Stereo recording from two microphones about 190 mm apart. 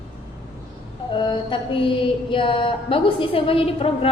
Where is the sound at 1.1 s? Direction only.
25° left (ahead or behind).